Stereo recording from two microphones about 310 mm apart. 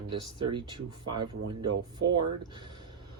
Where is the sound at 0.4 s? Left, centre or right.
Centre.